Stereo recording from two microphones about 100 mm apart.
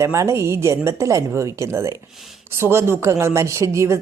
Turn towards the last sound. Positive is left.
turn(degrees=-30)  # may be behind; listen again after turning